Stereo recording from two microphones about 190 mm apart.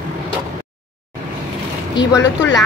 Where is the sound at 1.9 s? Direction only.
20° left (ahead or behind).